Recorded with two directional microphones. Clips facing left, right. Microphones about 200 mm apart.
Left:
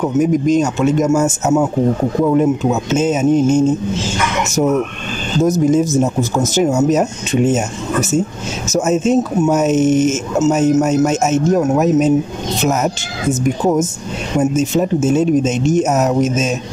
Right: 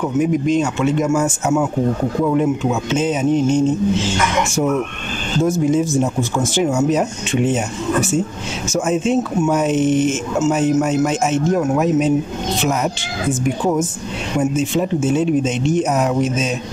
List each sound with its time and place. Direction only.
0.2 s speech: 40° left (ahead or behind)
5.4 s speech: 40° left (ahead or behind)